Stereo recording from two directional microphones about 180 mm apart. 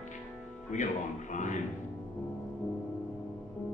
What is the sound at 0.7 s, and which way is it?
Speech, 45° left (ahead or behind).